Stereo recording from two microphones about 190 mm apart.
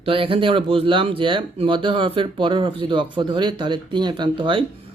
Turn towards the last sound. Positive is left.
turn(degrees=-25)  # may be behind; listen again after turning